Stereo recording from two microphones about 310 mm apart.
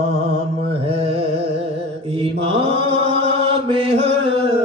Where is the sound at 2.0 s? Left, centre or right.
Centre.